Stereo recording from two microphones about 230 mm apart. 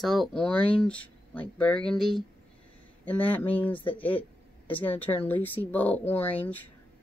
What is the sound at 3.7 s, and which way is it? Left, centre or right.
Speech, left.